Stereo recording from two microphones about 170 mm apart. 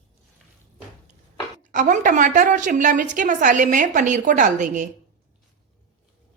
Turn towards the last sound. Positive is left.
turn(degrees=-50)  # may be behind; listen again after turning